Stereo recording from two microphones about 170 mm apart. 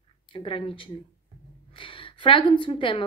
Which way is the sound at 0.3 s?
30° left (ahead or behind).